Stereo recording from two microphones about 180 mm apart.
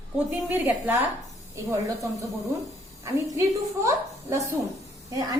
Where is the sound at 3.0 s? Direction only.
15° right (ahead or behind).